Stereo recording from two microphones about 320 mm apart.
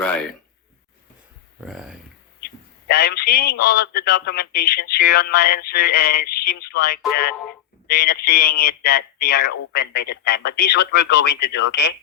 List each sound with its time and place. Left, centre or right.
0.0 s speech: centre
1.6 s speech: centre
2.9 s speech: left